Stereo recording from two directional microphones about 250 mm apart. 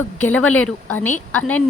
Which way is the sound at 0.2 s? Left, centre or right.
Centre.